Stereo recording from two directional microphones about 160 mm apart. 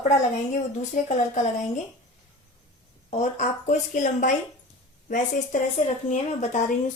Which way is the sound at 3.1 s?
50° left (ahead or behind).